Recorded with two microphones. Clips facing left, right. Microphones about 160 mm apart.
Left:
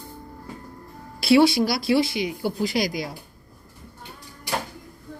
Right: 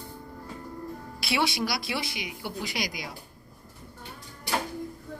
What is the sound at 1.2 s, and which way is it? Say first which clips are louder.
Speech: left 11 dB; 35° left (ahead or behind).